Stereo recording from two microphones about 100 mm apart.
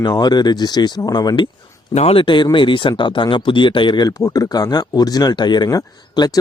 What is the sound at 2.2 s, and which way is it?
Speech, 50° left (ahead or behind).